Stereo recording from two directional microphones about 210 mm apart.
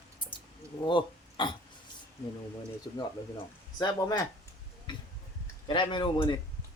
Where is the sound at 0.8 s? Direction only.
20° left (ahead or behind).